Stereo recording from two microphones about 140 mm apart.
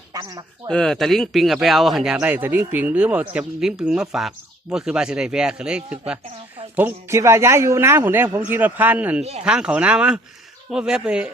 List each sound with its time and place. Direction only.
0.1 s speech: 25° right (ahead or behind)
0.7 s speech: 5° left (ahead or behind)